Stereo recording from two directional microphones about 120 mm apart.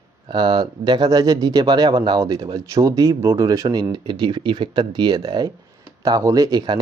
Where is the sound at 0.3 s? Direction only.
40° right (ahead or behind).